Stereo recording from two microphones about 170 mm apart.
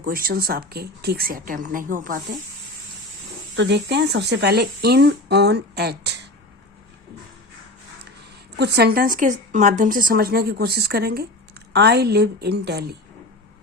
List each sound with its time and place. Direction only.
0.0 s speech: 60° right (ahead or behind)
3.5 s speech: 90° right
8.5 s speech: 75° right (ahead or behind)